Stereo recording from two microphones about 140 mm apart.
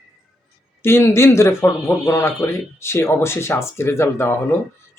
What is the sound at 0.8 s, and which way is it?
A man's voice, 20° left (ahead or behind).